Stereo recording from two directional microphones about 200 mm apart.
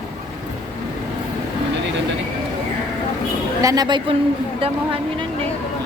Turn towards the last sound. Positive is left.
turn(degrees=-20)  # may be behind; listen again after turning